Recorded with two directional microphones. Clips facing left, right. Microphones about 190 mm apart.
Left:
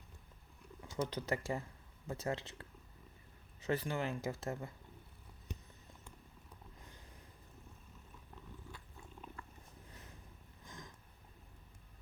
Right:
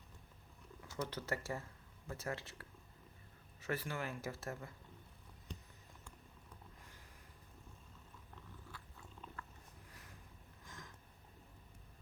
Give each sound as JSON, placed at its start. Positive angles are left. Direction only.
{"t": 0.8, "sound": "speech", "side_deg": 20}
{"t": 9.2, "sound": "cat", "side_deg": 15}
{"t": 9.9, "sound": "a sound", "side_deg": 20}